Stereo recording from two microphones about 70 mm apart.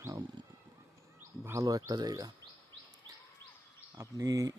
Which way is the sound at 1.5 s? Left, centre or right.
Right.